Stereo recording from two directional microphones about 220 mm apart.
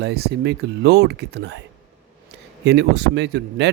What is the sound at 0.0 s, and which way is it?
Speech, 50° right (ahead or behind).